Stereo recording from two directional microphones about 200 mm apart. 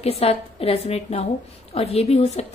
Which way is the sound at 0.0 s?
30° left (ahead or behind).